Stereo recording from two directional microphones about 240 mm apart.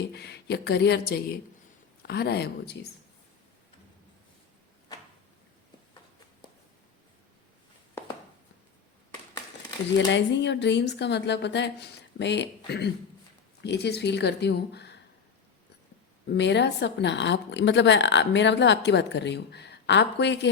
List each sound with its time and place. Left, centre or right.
0.1 s a woman's voice: left
10.1 s a woman's voice: left
16.2 s a woman's voice: left